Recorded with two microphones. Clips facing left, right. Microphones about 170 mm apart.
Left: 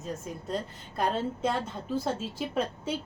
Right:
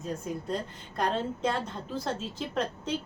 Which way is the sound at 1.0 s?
5° left (ahead or behind).